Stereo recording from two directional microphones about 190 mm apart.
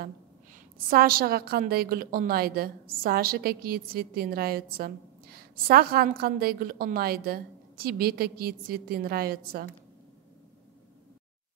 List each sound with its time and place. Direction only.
0.8 s a woman's voice: 50° right (ahead or behind)